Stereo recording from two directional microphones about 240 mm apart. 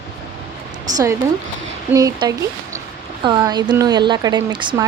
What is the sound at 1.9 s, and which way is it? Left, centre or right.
Speech, centre.